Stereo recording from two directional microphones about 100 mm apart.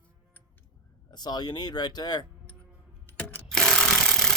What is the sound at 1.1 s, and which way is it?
Speech, 45° left (ahead or behind).